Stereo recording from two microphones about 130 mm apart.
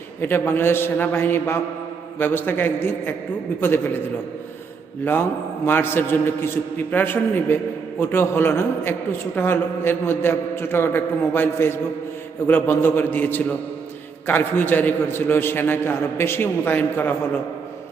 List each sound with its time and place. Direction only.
0.2 s a man's voice: 15° left (ahead or behind)
5.6 s a man's voice: 15° left (ahead or behind)